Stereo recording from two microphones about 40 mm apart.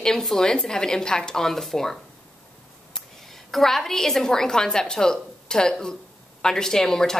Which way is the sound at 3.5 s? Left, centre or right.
Centre.